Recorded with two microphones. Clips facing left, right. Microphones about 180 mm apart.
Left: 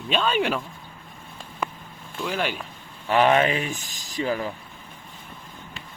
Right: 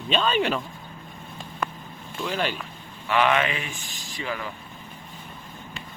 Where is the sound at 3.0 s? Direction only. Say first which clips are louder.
Left 3 dB; 40° left (ahead or behind).